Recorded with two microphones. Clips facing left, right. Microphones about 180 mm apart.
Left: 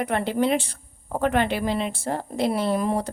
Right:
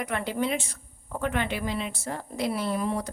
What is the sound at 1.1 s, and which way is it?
Speech, 70° left (ahead or behind).